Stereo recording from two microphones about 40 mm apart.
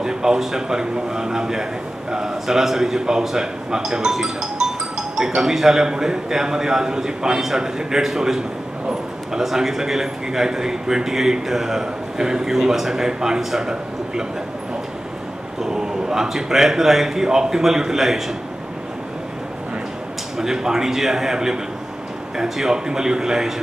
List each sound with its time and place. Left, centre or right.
0.0 s a man's voice: centre
15.6 s a man's voice: centre
20.3 s a man's voice: centre